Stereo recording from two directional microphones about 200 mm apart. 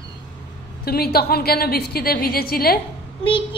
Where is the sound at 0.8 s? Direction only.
50° left (ahead or behind).